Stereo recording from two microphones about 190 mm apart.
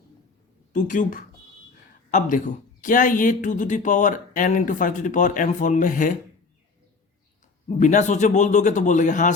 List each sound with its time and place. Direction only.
0.7 s a man's voice: 40° left (ahead or behind)
7.8 s a man's voice: 40° left (ahead or behind)